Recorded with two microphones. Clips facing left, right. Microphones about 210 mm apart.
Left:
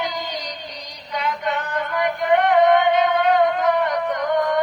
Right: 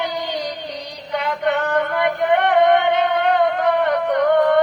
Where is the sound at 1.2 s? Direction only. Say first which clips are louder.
Right 4 dB; 60° right (ahead or behind).